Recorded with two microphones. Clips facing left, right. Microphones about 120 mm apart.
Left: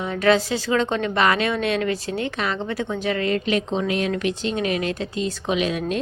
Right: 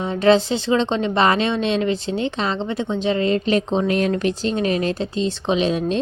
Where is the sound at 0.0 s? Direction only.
30° right (ahead or behind).